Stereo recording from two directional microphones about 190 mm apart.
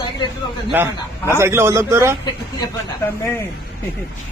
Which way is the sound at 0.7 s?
10° right (ahead or behind).